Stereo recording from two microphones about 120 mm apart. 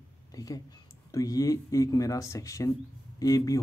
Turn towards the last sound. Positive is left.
turn(degrees=30)  # may be behind; listen again after turning